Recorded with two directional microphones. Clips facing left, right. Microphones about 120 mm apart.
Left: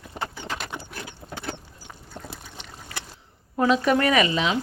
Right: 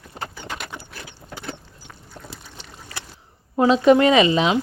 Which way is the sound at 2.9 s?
30° right (ahead or behind).